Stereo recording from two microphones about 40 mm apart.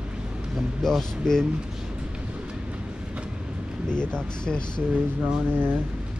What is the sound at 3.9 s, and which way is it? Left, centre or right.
Speech, left.